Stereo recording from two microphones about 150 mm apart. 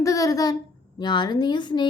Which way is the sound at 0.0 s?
20° left (ahead or behind).